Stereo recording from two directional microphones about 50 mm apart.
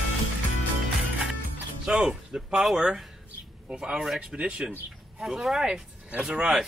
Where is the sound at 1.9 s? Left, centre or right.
Centre.